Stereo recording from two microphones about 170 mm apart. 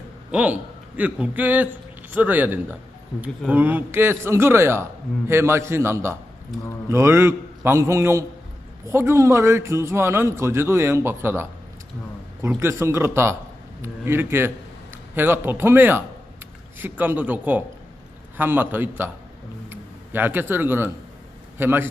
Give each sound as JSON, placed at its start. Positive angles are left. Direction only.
{"t": 0.3, "sound": "a man's voice", "side_deg": -10}
{"t": 12.5, "sound": "a man's voice", "side_deg": -15}